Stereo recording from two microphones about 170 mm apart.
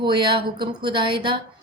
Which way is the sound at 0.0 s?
30° right (ahead or behind).